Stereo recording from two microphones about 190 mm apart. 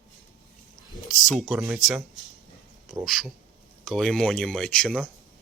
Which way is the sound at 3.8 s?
Centre (ahead or behind).